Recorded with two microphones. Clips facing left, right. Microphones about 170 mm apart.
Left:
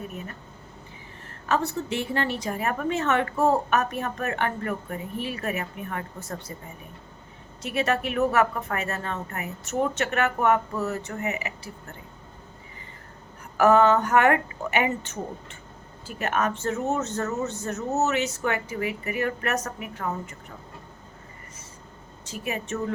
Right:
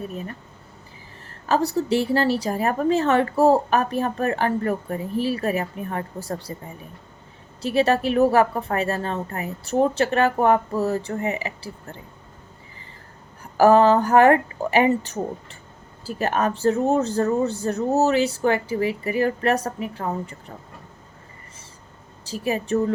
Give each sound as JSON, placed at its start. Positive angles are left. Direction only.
{"t": 1.5, "sound": "a woman's voice", "side_deg": -35}
{"t": 7.6, "sound": "a woman's voice", "side_deg": -30}
{"t": 13.4, "sound": "a woman's voice", "side_deg": -35}
{"t": 22.2, "sound": "a woman's voice", "side_deg": -35}